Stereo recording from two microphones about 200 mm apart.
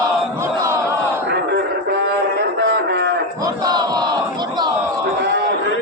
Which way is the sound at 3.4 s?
20° right (ahead or behind).